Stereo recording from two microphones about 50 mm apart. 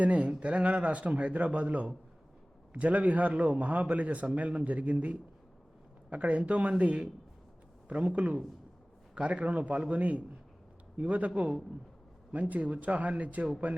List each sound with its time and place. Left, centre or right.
0.0 s speech: right
12.3 s speech: right